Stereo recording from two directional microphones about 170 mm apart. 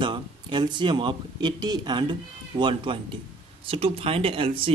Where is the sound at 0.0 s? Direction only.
30° right (ahead or behind).